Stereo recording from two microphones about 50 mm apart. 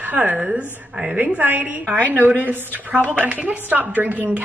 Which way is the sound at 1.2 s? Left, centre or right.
Right.